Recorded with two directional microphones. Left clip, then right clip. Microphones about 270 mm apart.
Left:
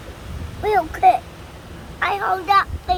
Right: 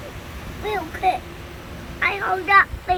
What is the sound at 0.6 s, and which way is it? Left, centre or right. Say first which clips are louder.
A child's voice: left 7 dB; centre.